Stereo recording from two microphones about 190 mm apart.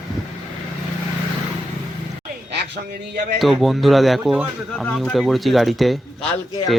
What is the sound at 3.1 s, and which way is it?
Speech, 60° right (ahead or behind).